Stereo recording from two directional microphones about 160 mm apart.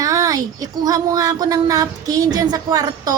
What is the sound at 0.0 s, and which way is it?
Speech, 20° right (ahead or behind).